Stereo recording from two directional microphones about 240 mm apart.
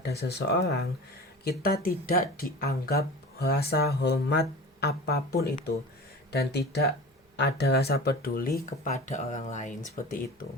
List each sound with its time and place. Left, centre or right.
0.0 s speech: left